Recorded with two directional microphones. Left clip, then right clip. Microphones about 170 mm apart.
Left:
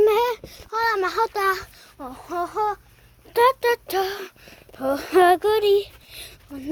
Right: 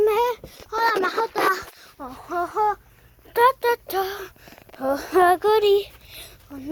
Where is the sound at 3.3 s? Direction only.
10° left (ahead or behind).